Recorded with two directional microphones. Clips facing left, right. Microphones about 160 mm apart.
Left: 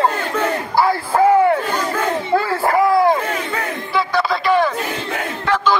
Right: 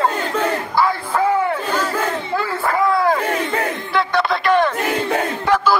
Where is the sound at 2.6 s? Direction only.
30° left (ahead or behind).